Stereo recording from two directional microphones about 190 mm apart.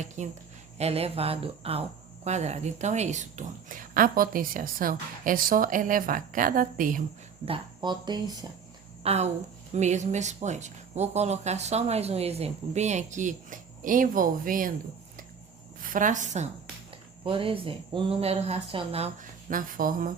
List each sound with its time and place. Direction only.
0.2 s a woman's voice: 40° right (ahead or behind)
7.4 s speech: 25° right (ahead or behind)
9.0 s speech: 35° right (ahead or behind)
15.8 s a woman's voice: 45° right (ahead or behind)
17.2 s speech: 30° right (ahead or behind); by 20.1 s 45° right (ahead or behind)